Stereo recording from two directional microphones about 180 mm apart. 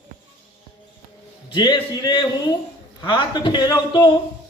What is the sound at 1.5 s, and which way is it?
A man's voice, 25° left (ahead or behind).